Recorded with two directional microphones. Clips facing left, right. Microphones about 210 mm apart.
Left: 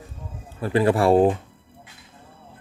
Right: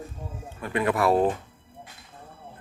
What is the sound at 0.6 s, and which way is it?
Speech, 30° left (ahead or behind).